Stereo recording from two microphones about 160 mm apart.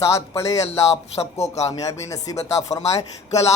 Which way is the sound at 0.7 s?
40° left (ahead or behind).